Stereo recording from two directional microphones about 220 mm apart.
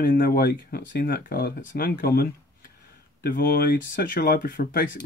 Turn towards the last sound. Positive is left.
turn(degrees=40)  # may be behind; listen again after turning